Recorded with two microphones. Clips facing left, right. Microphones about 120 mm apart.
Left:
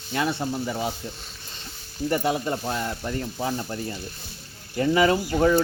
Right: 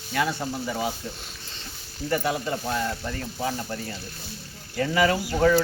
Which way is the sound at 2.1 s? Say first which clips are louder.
Left 1 dB; 25° left (ahead or behind).